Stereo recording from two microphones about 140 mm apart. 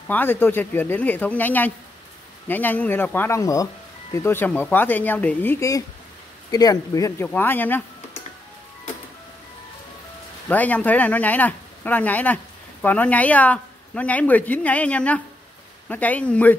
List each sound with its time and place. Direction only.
0.1 s speech: 15° left (ahead or behind)
10.5 s speech: 10° left (ahead or behind)